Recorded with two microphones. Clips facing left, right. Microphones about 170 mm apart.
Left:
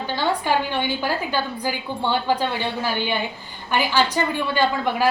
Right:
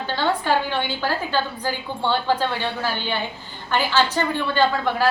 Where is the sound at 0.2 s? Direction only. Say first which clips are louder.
Right 1 dB; 15° left (ahead or behind).